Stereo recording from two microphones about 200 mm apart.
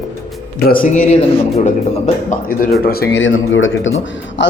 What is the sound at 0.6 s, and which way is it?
Speech, 45° left (ahead or behind).